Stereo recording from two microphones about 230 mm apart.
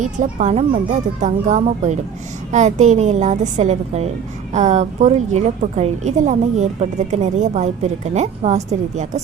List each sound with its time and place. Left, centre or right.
0.0 s a woman's voice: right